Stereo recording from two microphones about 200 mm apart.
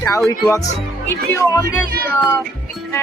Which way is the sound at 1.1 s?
15° left (ahead or behind).